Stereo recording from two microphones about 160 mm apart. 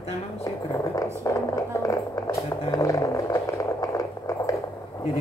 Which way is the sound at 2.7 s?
20° left (ahead or behind).